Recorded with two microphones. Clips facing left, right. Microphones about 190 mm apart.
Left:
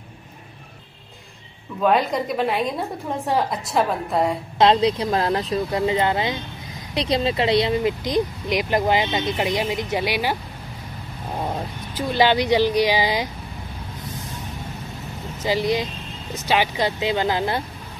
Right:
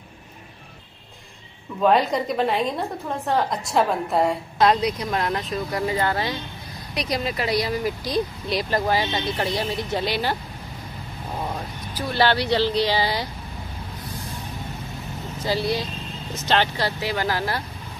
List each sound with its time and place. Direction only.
1.8 s a woman's voice: centre (ahead or behind)
4.6 s speech: 25° left (ahead or behind)
12.1 s speech: 15° left (ahead or behind)
15.4 s speech: 15° left (ahead or behind)